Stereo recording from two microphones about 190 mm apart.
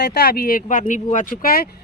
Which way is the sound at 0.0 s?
60° left (ahead or behind).